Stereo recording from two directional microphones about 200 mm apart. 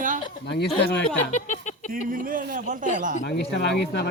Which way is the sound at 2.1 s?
45° right (ahead or behind).